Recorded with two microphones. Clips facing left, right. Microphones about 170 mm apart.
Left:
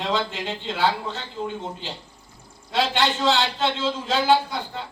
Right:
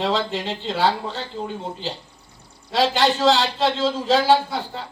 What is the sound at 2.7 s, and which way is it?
A man's voice, 35° right (ahead or behind).